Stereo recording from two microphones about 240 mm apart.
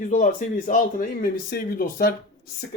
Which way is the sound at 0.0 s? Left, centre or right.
Left.